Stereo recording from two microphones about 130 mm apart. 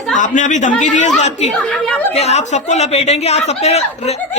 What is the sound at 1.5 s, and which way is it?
Speech, 10° left (ahead or behind).